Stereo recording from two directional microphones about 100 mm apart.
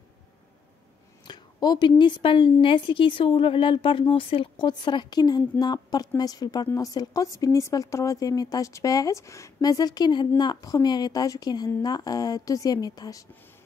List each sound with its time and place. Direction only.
1.2 s a woman's voice: 45° left (ahead or behind)